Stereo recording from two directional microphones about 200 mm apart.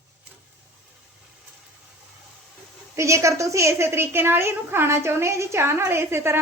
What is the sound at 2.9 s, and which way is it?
A woman's voice, 15° right (ahead or behind).